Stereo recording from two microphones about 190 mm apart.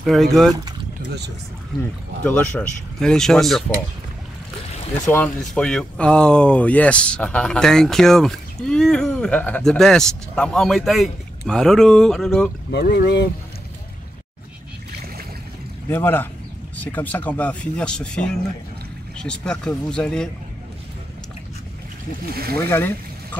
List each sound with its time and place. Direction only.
0.0 s speech: centre (ahead or behind)
1.8 s speech: 5° left (ahead or behind)
5.0 s speech: 10° left (ahead or behind)
12.7 s speech: 60° left (ahead or behind)
15.9 s speech: 10° left (ahead or behind)
22.3 s speech: 55° right (ahead or behind)
22.6 s speech: 10° left (ahead or behind)